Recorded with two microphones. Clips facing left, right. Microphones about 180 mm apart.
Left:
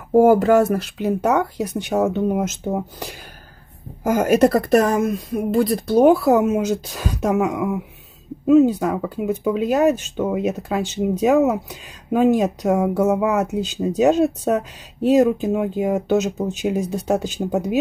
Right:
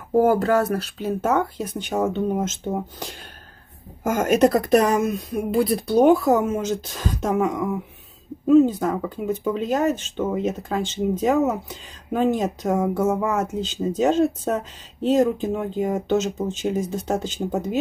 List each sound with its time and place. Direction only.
0.1 s speech: 20° left (ahead or behind)